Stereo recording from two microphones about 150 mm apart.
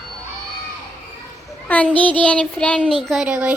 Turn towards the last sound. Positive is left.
turn(degrees=-5)  # may be behind; listen again after turning